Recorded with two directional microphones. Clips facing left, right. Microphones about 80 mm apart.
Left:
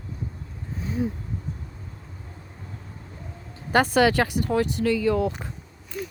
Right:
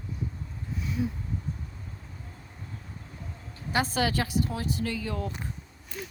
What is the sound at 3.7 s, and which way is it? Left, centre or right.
Speech, left.